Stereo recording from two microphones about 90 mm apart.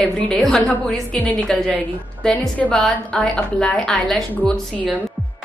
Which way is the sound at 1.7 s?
15° left (ahead or behind).